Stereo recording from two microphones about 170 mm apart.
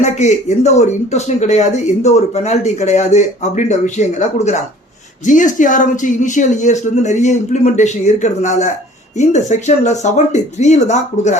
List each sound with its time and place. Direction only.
0.0 s speech: 45° left (ahead or behind)